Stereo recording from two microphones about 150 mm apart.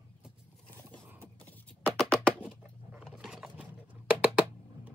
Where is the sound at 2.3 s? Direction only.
5° right (ahead or behind).